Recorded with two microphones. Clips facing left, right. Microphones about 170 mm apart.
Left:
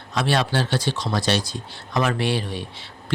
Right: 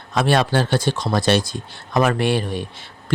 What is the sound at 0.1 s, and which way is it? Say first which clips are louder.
Speech: right 4 dB; 50° right (ahead or behind).